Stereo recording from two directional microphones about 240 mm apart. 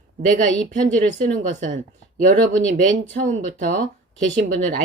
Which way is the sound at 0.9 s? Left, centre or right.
Right.